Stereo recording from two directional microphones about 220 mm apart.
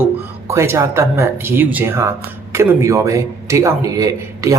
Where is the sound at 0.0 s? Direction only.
10° right (ahead or behind).